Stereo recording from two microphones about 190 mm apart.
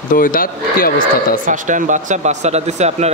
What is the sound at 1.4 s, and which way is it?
Speech, 40° right (ahead or behind).